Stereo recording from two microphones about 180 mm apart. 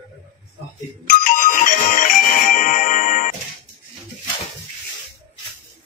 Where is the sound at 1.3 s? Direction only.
45° left (ahead or behind).